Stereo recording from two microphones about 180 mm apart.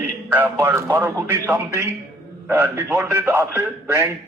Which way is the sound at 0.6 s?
15° right (ahead or behind).